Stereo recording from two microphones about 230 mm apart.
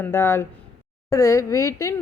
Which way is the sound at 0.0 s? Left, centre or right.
Centre.